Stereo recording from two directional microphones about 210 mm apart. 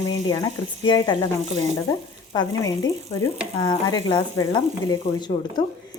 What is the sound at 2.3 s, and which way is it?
Speech, 20° left (ahead or behind).